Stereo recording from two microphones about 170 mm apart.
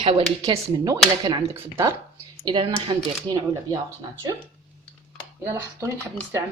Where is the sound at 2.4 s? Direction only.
30° right (ahead or behind).